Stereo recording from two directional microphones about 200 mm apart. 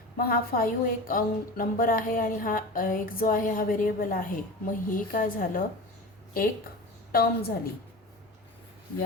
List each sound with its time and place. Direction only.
0.2 s a woman's voice: 45° left (ahead or behind)
7.1 s a woman's voice: 45° left (ahead or behind)